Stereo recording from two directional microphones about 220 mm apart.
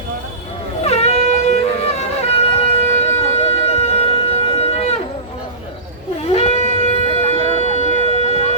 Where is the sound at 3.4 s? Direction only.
30° left (ahead or behind).